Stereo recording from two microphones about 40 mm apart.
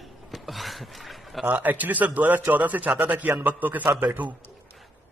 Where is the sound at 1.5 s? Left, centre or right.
Right.